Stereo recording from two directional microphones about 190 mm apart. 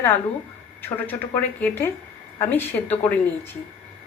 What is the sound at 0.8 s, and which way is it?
A woman's voice, 10° left (ahead or behind).